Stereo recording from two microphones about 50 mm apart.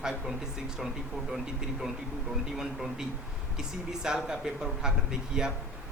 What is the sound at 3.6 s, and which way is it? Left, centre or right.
Speech, centre.